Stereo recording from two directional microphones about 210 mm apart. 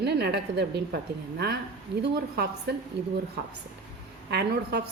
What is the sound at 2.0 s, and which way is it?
Speech, 50° right (ahead or behind).